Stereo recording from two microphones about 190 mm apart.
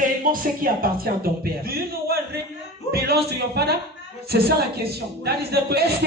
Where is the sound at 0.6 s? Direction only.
50° right (ahead or behind).